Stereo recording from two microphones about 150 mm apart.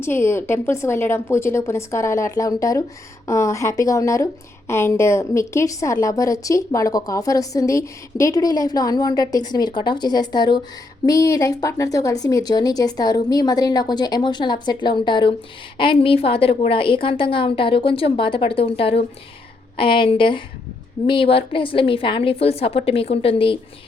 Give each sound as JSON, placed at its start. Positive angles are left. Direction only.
{"t": 0.0, "sound": "a woman's voice", "side_deg": 15}